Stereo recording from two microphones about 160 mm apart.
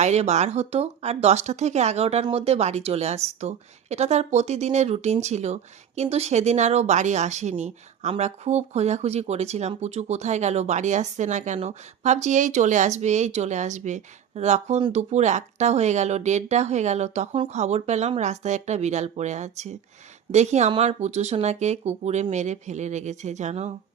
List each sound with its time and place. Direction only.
0.0 s speech: 45° right (ahead or behind)